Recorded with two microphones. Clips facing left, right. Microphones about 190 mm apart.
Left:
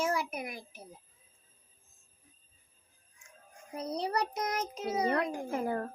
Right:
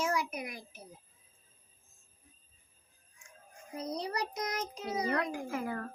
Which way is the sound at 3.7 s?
30° left (ahead or behind).